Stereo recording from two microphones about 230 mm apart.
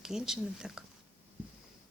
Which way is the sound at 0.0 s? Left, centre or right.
Centre.